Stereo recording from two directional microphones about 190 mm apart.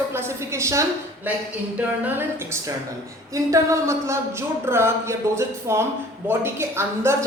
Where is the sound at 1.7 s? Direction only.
10° right (ahead or behind).